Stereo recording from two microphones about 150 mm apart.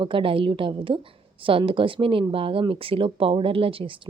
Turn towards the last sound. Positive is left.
turn(degrees=-35)  # may be behind; listen again after turning